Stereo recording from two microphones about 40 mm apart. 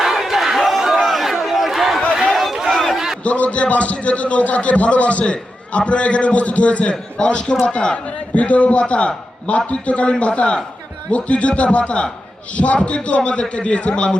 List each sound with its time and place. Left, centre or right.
0.0 s battle cry: centre
0.8 s a sound: centre
3.2 s a man's voice: left
8.0 s a man's voice: left